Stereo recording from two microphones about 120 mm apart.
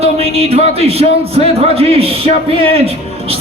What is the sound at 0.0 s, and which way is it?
Speech, 55° right (ahead or behind).